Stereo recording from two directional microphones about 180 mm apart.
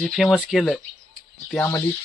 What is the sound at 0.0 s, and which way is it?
Speech, centre (ahead or behind).